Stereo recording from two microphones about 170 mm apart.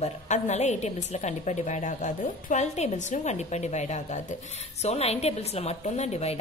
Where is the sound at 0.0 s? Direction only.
40° left (ahead or behind).